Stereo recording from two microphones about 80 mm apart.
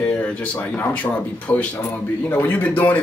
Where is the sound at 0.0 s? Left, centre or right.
Centre.